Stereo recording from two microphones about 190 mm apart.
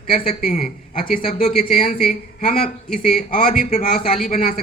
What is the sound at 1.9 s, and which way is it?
A woman's voice, 50° left (ahead or behind).